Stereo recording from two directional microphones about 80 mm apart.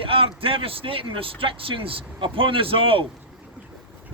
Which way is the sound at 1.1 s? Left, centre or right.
Right.